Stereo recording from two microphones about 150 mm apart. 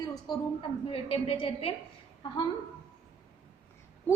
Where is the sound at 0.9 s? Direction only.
40° left (ahead or behind).